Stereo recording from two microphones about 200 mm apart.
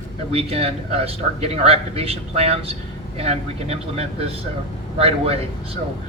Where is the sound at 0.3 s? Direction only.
30° right (ahead or behind).